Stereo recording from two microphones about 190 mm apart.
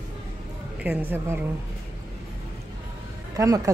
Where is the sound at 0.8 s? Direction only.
10° right (ahead or behind).